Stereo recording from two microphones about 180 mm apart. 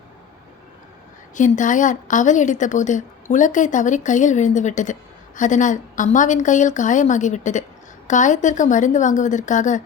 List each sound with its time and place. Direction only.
1.4 s a woman's voice: 45° left (ahead or behind)